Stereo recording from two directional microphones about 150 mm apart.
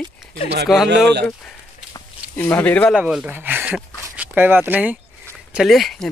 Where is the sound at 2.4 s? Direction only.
10° left (ahead or behind).